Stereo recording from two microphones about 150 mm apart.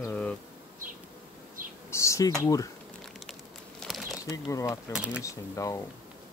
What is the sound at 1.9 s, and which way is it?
Insect, 20° left (ahead or behind).